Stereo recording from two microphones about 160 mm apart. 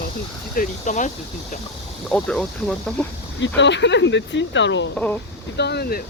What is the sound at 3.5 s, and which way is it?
Speech, 90° left.